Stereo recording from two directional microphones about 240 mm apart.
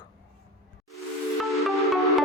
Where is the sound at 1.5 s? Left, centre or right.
Centre.